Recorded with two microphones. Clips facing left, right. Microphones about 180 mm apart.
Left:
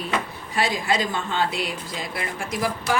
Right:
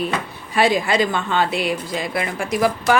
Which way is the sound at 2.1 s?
80° right.